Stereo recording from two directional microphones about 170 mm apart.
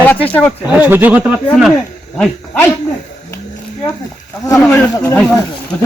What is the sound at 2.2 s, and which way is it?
Speech, 10° left (ahead or behind).